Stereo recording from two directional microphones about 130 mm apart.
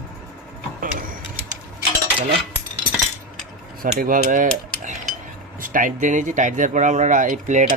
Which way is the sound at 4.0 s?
90° right.